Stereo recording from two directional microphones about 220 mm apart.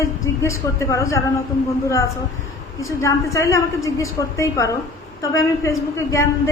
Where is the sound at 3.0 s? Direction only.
15° left (ahead or behind).